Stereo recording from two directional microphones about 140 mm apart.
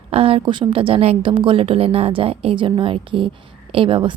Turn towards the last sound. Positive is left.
turn(degrees=-35)  # may be behind; listen again after turning